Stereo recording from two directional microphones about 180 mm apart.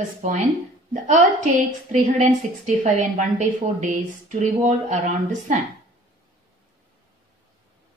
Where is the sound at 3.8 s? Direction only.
45° right (ahead or behind).